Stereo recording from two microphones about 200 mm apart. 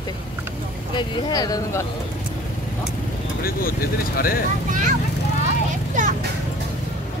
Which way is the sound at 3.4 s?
45° left (ahead or behind).